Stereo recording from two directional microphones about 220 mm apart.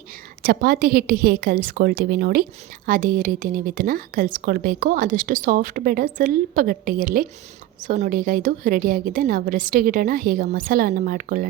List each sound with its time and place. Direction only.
0.4 s a woman's voice: 40° right (ahead or behind)